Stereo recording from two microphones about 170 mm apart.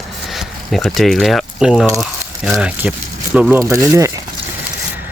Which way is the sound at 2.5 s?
10° right (ahead or behind).